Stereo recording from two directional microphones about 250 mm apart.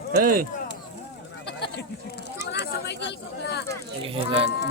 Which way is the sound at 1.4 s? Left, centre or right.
Left.